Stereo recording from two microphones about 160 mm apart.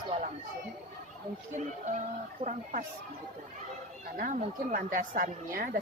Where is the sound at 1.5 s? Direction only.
50° right (ahead or behind).